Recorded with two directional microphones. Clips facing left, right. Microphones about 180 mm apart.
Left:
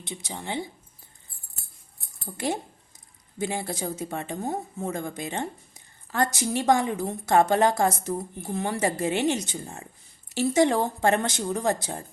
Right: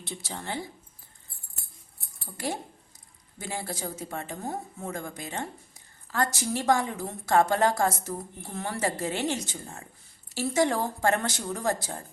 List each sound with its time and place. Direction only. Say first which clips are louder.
0.0 s a woman's voice: left 1 dB; 20° left (ahead or behind)
2.2 s a woman's voice: left 4 dB; 20° left (ahead or behind)